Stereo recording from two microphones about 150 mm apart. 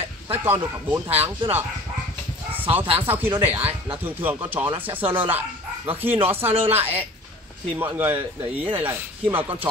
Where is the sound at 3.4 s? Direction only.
10° right (ahead or behind).